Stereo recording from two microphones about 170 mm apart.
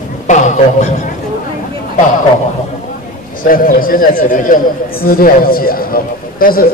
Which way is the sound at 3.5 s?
55° left (ahead or behind).